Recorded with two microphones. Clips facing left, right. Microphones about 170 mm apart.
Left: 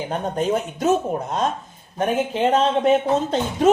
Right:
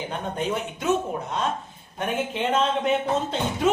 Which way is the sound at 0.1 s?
40° left (ahead or behind).